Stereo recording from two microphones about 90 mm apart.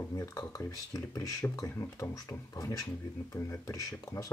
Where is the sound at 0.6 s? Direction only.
35° left (ahead or behind).